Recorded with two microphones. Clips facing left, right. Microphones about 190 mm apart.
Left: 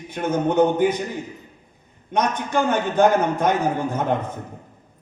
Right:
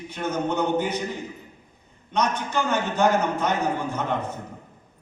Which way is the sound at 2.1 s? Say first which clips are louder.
Left 3 dB; 55° left (ahead or behind).